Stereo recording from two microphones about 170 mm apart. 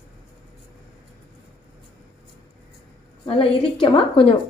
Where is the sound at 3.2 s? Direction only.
30° left (ahead or behind).